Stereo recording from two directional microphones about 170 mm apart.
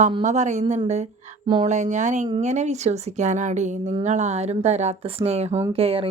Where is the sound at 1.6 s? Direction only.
45° right (ahead or behind).